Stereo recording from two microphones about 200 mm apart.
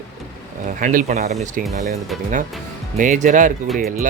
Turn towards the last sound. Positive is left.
turn(degrees=-45)  # may be behind; listen again after turning